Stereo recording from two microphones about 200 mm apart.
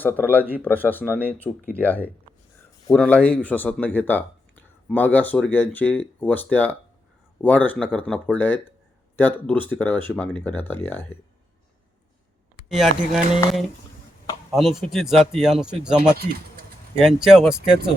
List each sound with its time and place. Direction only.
0.0 s speech: 10° left (ahead or behind)
12.6 s speech: centre (ahead or behind)
14.5 s speech: centre (ahead or behind)
16.1 s speech: 50° right (ahead or behind)
17.0 s speech: 5° right (ahead or behind)